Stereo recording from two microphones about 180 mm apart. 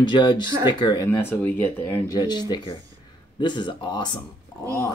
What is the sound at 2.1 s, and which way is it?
Speech, 25° left (ahead or behind).